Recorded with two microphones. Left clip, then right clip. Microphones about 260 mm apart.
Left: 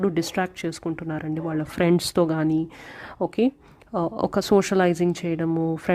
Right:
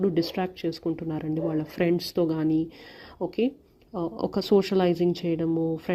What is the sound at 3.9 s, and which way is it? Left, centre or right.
Speech, left.